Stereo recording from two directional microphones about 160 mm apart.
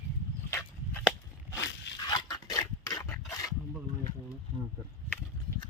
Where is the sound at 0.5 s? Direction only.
15° left (ahead or behind).